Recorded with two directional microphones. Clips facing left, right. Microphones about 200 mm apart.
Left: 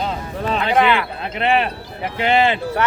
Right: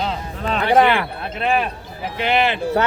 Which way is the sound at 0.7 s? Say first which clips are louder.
Right 2 dB; 45° right (ahead or behind).